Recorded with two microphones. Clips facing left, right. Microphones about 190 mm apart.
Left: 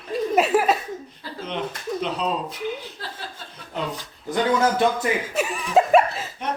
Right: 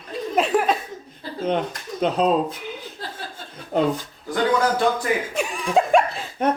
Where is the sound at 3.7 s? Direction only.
45° right (ahead or behind).